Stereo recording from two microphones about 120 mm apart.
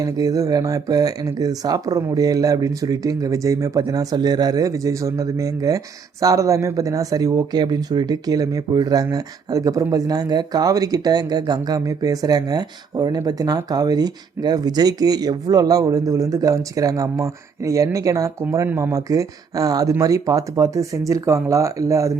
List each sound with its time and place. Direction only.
0.0 s speech: 30° right (ahead or behind)